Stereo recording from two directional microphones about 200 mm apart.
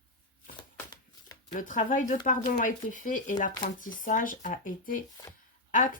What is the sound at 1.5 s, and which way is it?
Speech, 40° left (ahead or behind).